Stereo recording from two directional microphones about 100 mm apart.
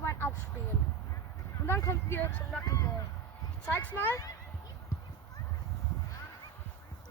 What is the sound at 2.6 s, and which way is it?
Speech, 35° left (ahead or behind).